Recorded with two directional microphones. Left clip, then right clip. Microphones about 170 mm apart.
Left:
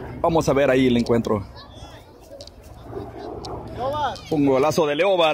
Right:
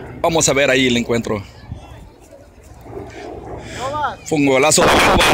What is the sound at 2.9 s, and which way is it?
Vehicle, 30° right (ahead or behind).